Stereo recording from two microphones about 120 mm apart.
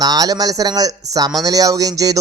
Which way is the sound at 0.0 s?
35° right (ahead or behind).